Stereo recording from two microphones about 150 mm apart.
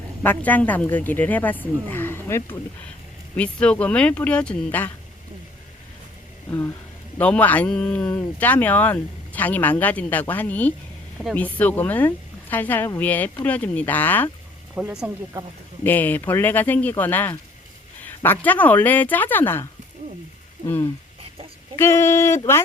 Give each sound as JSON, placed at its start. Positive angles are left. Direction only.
{"t": 0.2, "sound": "speech", "side_deg": 10}
{"t": 7.2, "sound": "speech", "side_deg": 10}
{"t": 14.8, "sound": "speech", "side_deg": -10}
{"t": 15.8, "sound": "speech", "side_deg": 10}
{"t": 21.8, "sound": "speech", "side_deg": 15}